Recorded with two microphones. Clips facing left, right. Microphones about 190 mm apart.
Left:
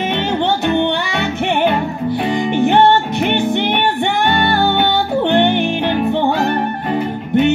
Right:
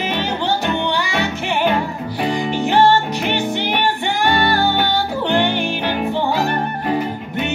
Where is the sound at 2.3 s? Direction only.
20° left (ahead or behind).